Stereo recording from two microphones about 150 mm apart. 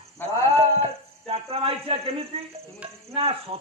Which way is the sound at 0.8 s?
40° right (ahead or behind).